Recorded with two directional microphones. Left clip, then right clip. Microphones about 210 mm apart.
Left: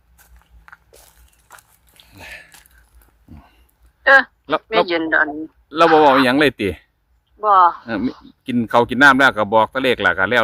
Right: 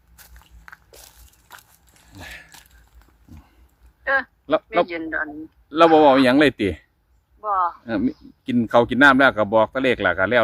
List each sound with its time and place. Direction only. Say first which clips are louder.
0.2 s biting: right 3 dB; 10° right (ahead or behind)
1.5 s biting: even; 20° left (ahead or behind)
4.0 s speech: left 10 dB; 45° left (ahead or behind)
5.6 s speech: left 2 dB; 25° left (ahead or behind)
7.4 s speech: left 10 dB; 45° left (ahead or behind)
7.9 s speech: left 1 dB; 25° left (ahead or behind)